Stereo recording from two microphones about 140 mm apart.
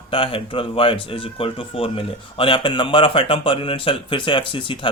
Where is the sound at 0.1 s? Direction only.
40° left (ahead or behind).